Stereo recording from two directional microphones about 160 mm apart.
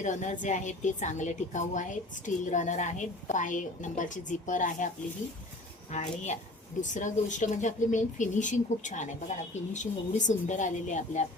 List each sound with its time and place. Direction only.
0.0 s a woman's voice: 50° left (ahead or behind)
5.9 s a woman's voice: 50° left (ahead or behind)